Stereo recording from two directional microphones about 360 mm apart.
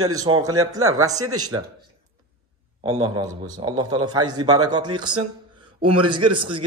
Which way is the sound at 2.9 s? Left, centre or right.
Right.